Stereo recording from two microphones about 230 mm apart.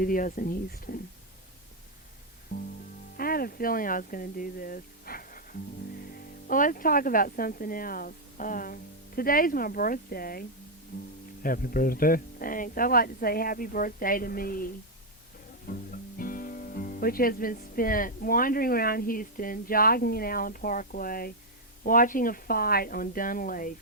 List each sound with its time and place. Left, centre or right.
0.0 s speech: left
2.5 s music: left
3.2 s speech: left
15.7 s speech: left